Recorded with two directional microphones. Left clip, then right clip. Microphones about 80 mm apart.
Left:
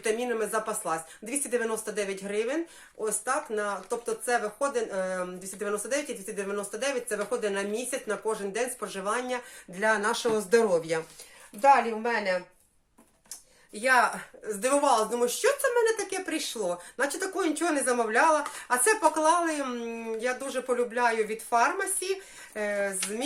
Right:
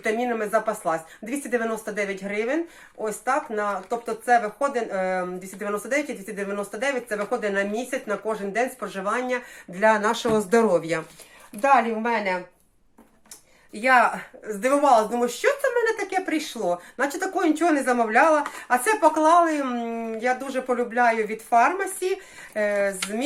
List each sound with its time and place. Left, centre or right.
0.0 s speech: left
10.3 s a woman's voice: centre
13.7 s a woman's voice: centre